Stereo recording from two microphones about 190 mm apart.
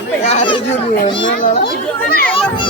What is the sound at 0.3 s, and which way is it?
Children playing, 30° left (ahead or behind).